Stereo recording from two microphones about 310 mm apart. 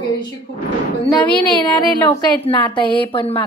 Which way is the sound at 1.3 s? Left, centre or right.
Centre.